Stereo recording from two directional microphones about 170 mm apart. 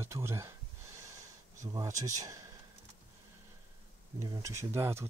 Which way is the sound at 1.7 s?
20° right (ahead or behind).